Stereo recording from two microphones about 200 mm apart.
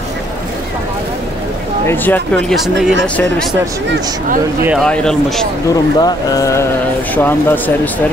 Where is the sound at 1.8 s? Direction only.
10° left (ahead or behind).